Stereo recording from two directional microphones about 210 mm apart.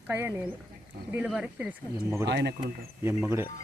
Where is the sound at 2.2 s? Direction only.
55° right (ahead or behind).